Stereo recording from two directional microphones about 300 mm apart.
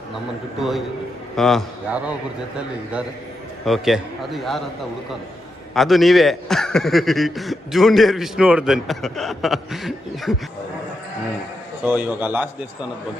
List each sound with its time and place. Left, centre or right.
1.4 s a man's voice: centre
3.7 s a man's voice: centre
5.7 s a man's voice: centre
11.8 s a man's voice: centre